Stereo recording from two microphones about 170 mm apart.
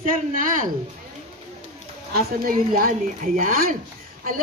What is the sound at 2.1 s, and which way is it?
A woman's voice, 55° right (ahead or behind).